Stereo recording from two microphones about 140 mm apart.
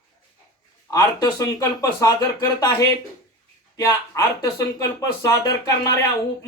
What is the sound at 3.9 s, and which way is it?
Speech, 25° left (ahead or behind).